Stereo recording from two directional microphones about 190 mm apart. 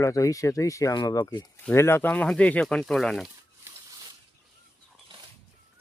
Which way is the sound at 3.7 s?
15° right (ahead or behind).